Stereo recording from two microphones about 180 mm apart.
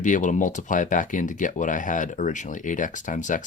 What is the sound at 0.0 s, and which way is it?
Speech, 45° left (ahead or behind).